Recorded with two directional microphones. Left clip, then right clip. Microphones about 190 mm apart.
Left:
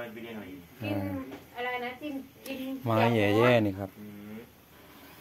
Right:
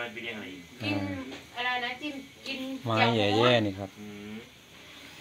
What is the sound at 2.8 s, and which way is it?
Speech, 20° left (ahead or behind).